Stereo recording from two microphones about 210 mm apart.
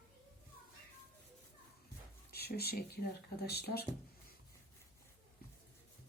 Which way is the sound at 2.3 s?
50° left (ahead or behind).